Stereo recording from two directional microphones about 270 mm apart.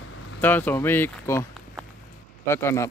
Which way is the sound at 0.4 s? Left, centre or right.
Centre.